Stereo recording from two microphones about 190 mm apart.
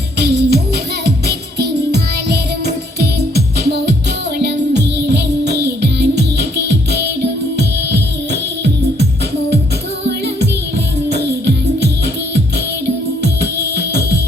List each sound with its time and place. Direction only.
0.2 s music: 60° right (ahead or behind)
11.1 s music: 60° right (ahead or behind)